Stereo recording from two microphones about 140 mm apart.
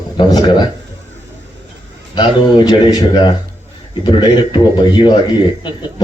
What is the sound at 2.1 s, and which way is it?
A man's voice, 30° left (ahead or behind).